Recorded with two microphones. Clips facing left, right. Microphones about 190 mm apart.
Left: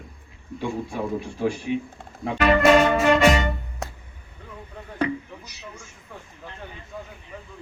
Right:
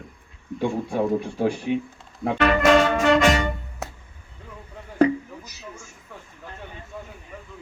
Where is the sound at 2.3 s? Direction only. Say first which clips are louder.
Left 1 dB; 10° left (ahead or behind).